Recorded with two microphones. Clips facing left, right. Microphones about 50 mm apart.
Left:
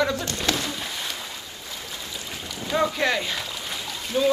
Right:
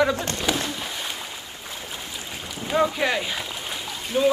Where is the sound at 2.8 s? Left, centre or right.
Centre.